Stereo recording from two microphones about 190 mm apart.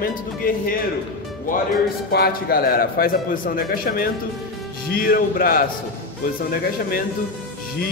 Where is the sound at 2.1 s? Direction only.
55° left (ahead or behind).